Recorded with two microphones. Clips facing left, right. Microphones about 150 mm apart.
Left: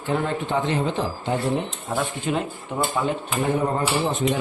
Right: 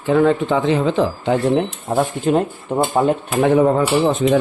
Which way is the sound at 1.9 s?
45° right (ahead or behind).